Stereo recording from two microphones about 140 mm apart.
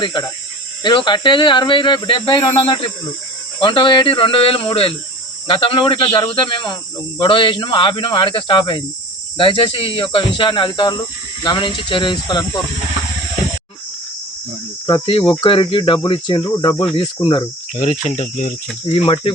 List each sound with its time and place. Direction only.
0.0 s speech: 30° left (ahead or behind)
14.8 s speech: 35° left (ahead or behind)
17.7 s speech: 55° left (ahead or behind)
18.9 s speech: 40° left (ahead or behind)